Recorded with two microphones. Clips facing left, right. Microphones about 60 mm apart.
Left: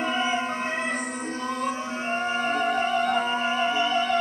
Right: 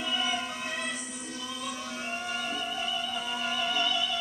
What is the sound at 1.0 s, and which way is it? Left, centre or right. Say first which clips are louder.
Music: left 9 dB; left.